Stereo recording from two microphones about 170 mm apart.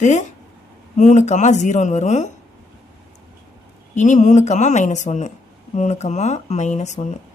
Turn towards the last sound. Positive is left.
turn(degrees=45)  # may be behind; listen again after turning